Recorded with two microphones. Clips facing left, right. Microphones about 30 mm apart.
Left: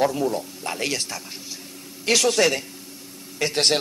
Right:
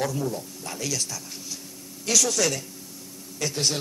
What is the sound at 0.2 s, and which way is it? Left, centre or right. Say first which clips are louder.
Speech: left 5 dB; left.